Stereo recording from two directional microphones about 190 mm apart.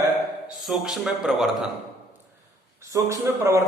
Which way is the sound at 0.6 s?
Centre (ahead or behind).